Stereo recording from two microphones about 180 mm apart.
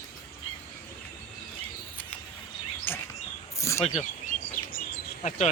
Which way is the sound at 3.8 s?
40° left (ahead or behind).